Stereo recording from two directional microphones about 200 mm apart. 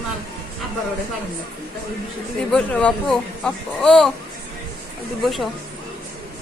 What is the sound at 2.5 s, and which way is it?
Speech, 5° left (ahead or behind).